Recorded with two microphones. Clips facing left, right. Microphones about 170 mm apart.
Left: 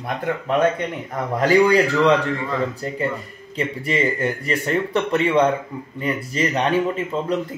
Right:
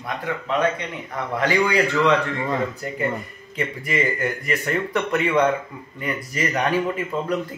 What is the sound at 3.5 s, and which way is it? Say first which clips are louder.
Speech: left 2 dB; 30° left (ahead or behind).